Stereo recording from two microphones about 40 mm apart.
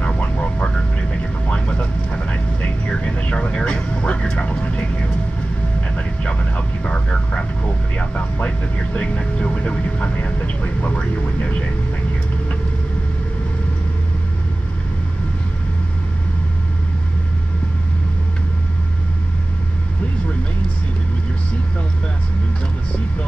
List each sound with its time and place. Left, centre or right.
0.4 s vehicle: left